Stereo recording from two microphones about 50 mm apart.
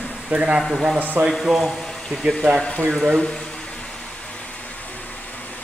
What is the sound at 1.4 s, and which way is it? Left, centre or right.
Speech, centre.